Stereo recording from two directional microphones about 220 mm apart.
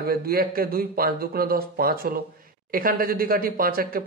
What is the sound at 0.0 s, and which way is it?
Speech, 45° right (ahead or behind).